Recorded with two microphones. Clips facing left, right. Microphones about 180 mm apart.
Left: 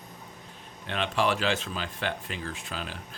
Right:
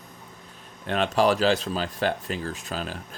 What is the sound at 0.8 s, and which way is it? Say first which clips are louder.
Speech: right 6 dB; 40° right (ahead or behind).